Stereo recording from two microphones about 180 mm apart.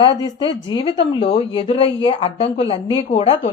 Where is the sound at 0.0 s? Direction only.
25° left (ahead or behind).